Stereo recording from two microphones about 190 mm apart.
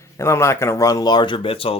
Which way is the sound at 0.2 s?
15° left (ahead or behind).